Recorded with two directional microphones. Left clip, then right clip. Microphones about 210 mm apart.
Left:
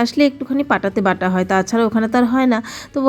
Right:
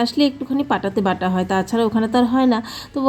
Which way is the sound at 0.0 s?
25° left (ahead or behind).